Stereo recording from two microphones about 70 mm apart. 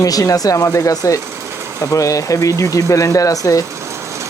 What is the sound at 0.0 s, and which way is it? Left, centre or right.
Speech, left.